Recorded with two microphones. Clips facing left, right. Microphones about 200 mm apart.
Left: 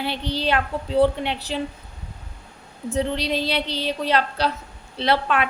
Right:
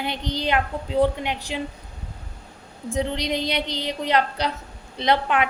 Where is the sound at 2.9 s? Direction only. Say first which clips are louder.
Left 1 dB; 15° right (ahead or behind).